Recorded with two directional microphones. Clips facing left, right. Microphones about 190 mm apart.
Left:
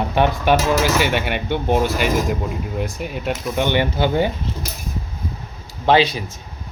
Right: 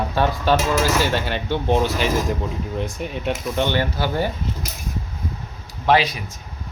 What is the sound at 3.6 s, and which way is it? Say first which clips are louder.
Speech: left 4 dB; 20° left (ahead or behind).